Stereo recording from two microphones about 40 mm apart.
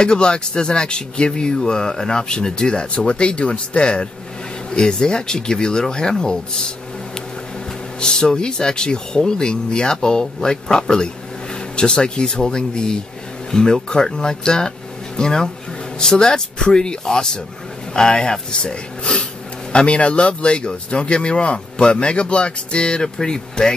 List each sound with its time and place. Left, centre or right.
0.0 s speech: left
8.0 s speech: centre